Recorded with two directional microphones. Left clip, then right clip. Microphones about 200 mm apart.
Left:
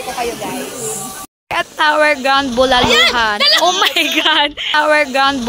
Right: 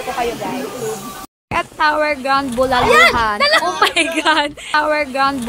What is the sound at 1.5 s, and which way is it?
Speech, centre (ahead or behind).